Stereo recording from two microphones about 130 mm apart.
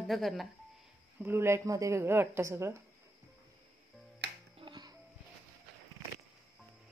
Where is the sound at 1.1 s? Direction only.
15° right (ahead or behind).